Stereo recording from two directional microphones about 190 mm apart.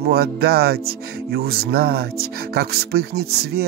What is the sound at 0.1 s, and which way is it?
Speech, 55° right (ahead or behind).